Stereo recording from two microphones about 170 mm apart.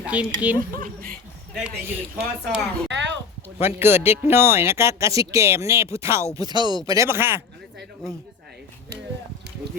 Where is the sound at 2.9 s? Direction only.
90° right.